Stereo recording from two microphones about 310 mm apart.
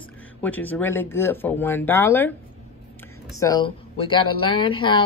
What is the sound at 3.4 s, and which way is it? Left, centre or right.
A woman's voice, centre.